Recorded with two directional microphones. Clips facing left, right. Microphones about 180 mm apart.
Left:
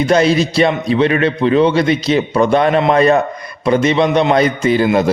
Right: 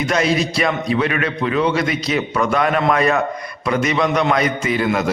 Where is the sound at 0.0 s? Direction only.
30° left (ahead or behind).